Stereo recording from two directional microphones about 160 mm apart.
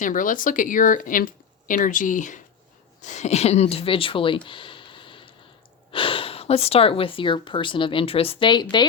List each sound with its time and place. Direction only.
0.0 s speech: 55° left (ahead or behind); by 8.6 s 30° left (ahead or behind)